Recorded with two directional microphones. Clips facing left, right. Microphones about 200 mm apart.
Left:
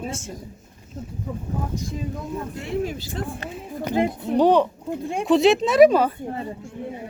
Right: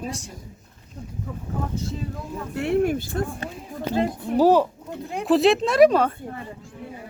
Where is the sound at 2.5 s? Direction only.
65° right (ahead or behind).